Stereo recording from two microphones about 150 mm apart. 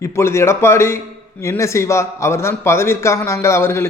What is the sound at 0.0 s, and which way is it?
A man's voice, 20° left (ahead or behind).